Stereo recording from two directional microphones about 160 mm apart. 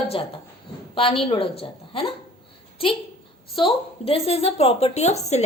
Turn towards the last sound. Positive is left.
turn(degrees=45)  # may be behind; listen again after turning